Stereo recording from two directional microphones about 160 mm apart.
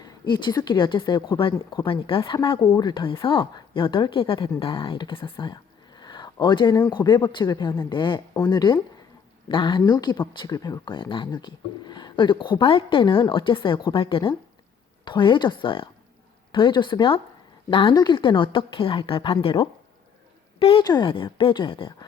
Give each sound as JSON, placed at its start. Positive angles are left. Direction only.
{"t": 0.0, "sound": "speech", "side_deg": 30}